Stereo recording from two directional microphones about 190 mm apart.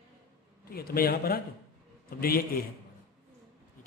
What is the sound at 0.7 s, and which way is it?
A man's voice, 50° left (ahead or behind).